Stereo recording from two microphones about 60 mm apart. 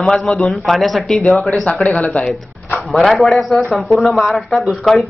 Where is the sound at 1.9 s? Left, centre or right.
Centre.